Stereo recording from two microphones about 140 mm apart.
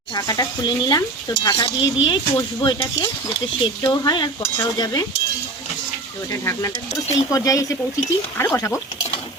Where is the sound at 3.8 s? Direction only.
30° left (ahead or behind).